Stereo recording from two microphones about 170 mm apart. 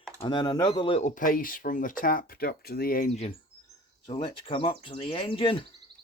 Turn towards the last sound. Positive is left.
turn(degrees=30)  # may be behind; listen again after turning